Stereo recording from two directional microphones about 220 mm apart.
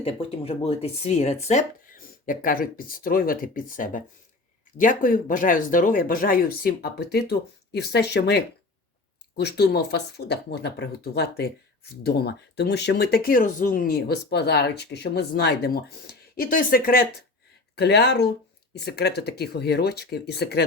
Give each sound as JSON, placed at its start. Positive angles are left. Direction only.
{"t": 0.0, "sound": "speech", "side_deg": 25}